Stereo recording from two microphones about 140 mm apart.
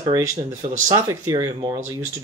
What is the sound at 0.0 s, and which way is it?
Speech, 25° right (ahead or behind).